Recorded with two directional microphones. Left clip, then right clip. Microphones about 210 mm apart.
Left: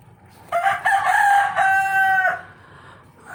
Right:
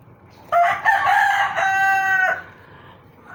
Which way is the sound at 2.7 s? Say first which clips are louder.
Even; 15° left (ahead or behind).